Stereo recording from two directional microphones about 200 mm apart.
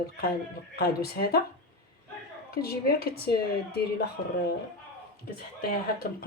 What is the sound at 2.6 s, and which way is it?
Speech, 50° left (ahead or behind).